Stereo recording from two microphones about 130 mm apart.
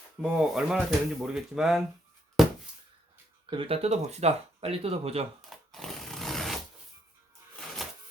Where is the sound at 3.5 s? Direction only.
45° right (ahead or behind).